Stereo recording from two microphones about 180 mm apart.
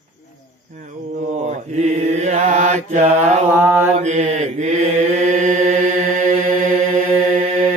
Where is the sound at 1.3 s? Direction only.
40° right (ahead or behind).